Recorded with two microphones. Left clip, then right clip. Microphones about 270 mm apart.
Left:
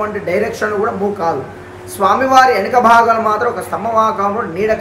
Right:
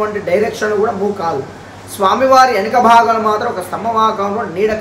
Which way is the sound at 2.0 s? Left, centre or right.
Centre.